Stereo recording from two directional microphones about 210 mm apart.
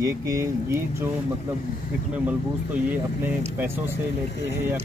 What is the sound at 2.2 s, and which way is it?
Speech, 10° right (ahead or behind).